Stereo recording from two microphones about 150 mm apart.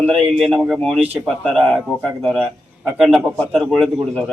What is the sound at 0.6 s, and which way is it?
Speech, centre (ahead or behind).